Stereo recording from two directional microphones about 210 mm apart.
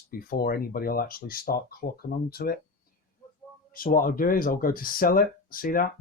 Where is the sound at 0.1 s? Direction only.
45° left (ahead or behind).